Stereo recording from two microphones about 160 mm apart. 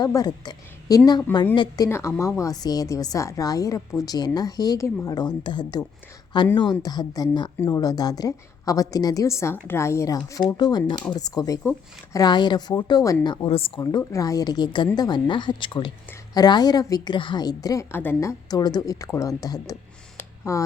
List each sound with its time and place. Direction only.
0.0 s a woman's voice: 25° left (ahead or behind)